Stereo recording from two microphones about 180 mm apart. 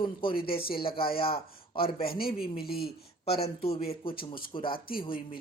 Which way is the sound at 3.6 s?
30° left (ahead or behind).